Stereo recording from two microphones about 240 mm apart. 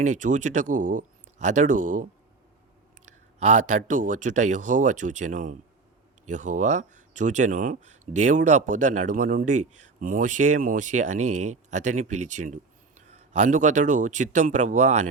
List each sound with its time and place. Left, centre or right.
0.0 s speech: right
3.4 s speech: right